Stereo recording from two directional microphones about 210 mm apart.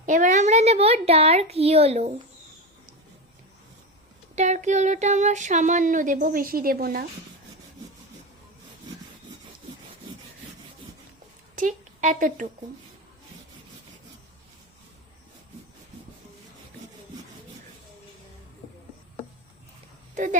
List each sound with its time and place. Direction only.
0.0 s a woman's voice: 35° right (ahead or behind)
4.4 s a sound: 35° right (ahead or behind)
11.5 s a woman's voice: 35° right (ahead or behind)